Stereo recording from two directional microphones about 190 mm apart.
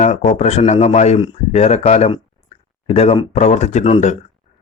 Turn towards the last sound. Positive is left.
turn(degrees=35)  # may be behind; listen again after turning